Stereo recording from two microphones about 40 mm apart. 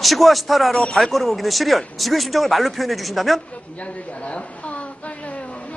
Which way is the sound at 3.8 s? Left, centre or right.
Left.